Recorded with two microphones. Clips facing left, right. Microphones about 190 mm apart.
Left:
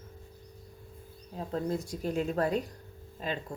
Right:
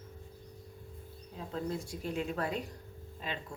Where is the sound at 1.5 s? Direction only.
40° left (ahead or behind).